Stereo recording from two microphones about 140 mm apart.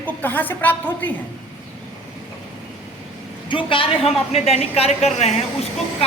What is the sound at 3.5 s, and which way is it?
A woman's voice, 40° left (ahead or behind).